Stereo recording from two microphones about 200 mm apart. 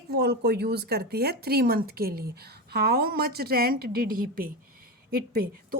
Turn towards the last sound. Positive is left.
turn(degrees=-50)  # may be behind; listen again after turning